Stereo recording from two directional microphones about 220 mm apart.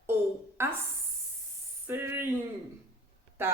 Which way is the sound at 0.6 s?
10° right (ahead or behind).